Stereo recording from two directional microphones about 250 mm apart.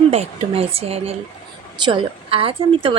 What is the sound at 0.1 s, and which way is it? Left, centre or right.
Speech, right.